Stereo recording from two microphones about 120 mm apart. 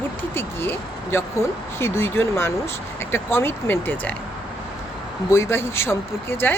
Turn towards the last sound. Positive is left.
turn(degrees=20)  # may be behind; listen again after turning